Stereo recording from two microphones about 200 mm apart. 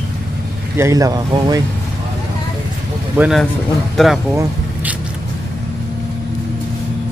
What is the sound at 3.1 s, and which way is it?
Speech, 10° right (ahead or behind).